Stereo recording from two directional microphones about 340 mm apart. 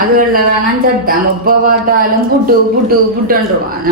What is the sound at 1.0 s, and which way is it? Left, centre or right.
A man's voice, right.